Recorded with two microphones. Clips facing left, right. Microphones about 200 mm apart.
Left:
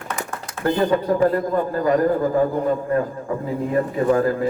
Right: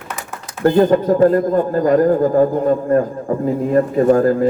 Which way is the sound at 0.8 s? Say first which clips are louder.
Right 6 dB; 45° right (ahead or behind).